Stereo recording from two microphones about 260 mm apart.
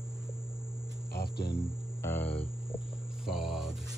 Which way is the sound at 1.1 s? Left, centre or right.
Left.